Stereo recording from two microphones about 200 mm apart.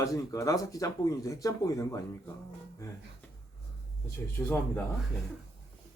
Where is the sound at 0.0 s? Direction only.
15° left (ahead or behind).